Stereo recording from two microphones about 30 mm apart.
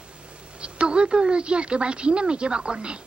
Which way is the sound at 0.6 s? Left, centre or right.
Right.